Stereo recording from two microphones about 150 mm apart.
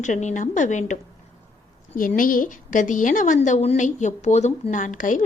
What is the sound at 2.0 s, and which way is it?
A woman's voice, 65° left (ahead or behind).